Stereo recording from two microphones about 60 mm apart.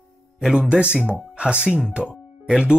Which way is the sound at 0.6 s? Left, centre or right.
Centre.